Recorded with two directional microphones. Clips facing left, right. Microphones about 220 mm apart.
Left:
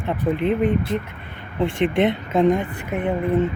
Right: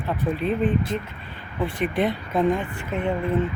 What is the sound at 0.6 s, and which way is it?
Speech, 60° left (ahead or behind).